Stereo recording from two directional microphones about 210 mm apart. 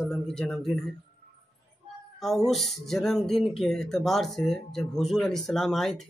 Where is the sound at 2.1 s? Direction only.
Centre (ahead or behind).